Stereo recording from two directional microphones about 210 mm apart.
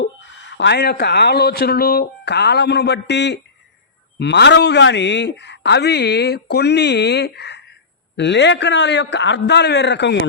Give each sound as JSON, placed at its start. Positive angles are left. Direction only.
{"t": 0.5, "sound": "a man's voice", "side_deg": 55}